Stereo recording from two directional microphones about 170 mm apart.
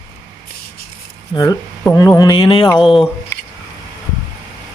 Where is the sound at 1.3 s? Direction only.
25° left (ahead or behind).